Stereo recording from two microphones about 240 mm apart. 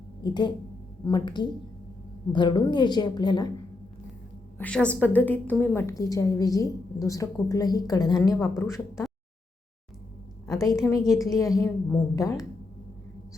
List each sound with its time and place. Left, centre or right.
0.2 s a woman's voice: centre
4.5 s a woman's voice: centre
10.4 s a woman's voice: centre